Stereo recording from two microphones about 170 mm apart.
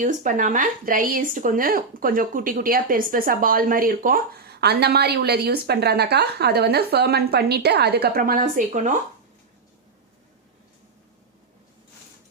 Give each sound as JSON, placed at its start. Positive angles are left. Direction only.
{"t": 0.0, "sound": "speech", "side_deg": -50}